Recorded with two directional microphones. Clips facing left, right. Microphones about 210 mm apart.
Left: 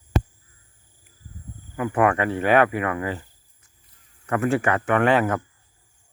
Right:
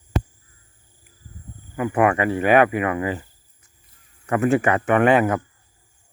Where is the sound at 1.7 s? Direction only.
10° right (ahead or behind).